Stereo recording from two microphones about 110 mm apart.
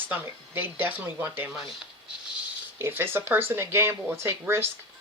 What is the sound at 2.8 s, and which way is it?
Speech, 20° right (ahead or behind).